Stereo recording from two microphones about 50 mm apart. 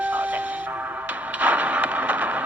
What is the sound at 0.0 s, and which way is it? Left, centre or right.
Speech, right.